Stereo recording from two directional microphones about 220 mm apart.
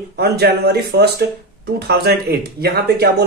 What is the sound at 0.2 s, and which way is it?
Speech, 45° right (ahead or behind).